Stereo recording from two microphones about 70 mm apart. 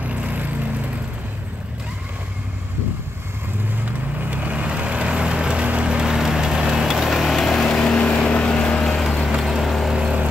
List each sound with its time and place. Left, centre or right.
0.0 s vehicle: right
3.8 s vehicle: right; by 9.9 s centre
9.9 s vehicle: centre